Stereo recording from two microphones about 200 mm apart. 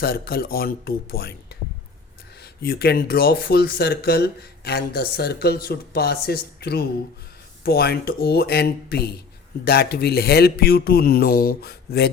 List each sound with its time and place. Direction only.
0.0 s speech: 50° left (ahead or behind)
2.4 s speech: 50° left (ahead or behind)